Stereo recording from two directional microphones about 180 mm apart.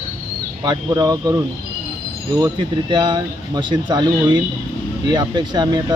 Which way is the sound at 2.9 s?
25° right (ahead or behind).